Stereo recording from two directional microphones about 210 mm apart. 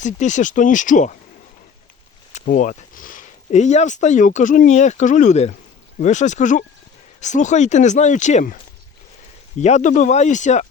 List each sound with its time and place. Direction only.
0.0 s speech: 35° left (ahead or behind)
2.3 s speech: 35° left (ahead or behind)
9.6 s speech: 35° left (ahead or behind)